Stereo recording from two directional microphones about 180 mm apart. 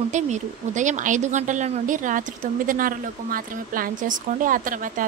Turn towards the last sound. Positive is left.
turn(degrees=-50)  # may be behind; listen again after turning